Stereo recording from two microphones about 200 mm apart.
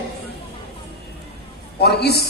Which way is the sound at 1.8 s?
55° left (ahead or behind).